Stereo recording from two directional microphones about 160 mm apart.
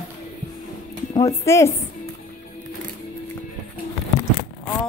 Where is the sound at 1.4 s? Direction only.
15° left (ahead or behind).